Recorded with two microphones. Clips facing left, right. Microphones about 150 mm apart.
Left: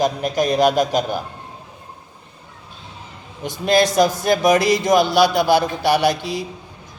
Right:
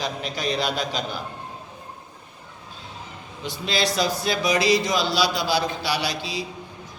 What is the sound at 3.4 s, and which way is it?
A man's voice, 50° left (ahead or behind).